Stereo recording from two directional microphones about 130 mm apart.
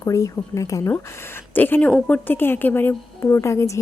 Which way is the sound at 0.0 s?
25° left (ahead or behind).